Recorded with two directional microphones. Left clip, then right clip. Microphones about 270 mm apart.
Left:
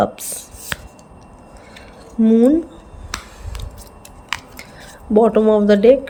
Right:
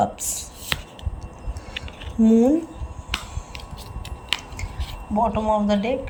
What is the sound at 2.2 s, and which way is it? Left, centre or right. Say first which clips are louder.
Speech: left 4 dB; centre.